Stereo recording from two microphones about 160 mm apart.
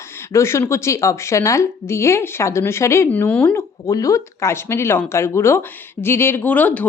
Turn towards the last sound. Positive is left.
turn(degrees=10)  # may be behind; listen again after turning